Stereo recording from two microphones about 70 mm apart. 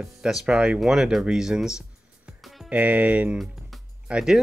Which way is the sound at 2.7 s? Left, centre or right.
Centre.